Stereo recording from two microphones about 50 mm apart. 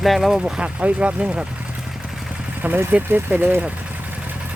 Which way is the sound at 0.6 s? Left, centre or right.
Right.